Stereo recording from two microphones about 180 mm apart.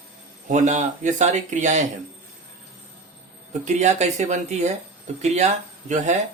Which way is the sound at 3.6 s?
40° right (ahead or behind).